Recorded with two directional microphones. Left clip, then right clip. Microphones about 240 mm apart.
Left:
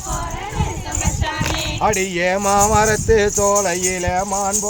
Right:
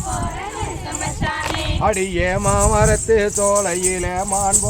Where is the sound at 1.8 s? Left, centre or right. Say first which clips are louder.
Left 1 dB; left.